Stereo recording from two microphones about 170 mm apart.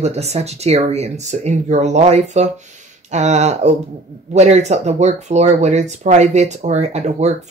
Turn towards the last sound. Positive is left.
turn(degrees=-40)  # may be behind; listen again after turning